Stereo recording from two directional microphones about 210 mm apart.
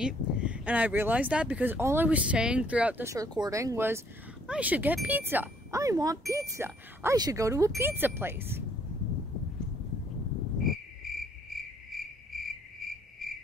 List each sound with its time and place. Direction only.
0.0 s speech: 5° right (ahead or behind)
10.6 s cricket: centre (ahead or behind)